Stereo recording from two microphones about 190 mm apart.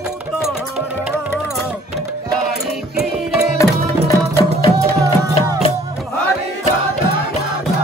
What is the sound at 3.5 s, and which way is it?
Tabla, 15° left (ahead or behind).